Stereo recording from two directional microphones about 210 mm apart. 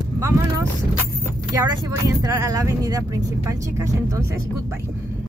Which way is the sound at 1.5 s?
15° right (ahead or behind).